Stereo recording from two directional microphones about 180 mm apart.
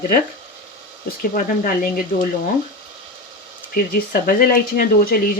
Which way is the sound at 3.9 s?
50° left (ahead or behind).